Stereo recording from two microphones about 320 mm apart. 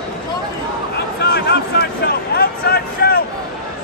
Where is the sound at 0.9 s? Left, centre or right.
Left.